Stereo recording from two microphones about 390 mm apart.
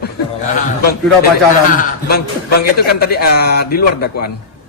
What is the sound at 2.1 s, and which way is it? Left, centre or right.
A man's voice, left.